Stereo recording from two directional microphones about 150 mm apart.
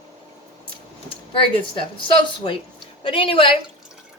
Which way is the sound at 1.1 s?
35° left (ahead or behind).